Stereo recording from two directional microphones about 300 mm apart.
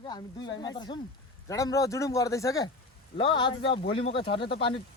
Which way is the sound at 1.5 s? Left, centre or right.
Centre.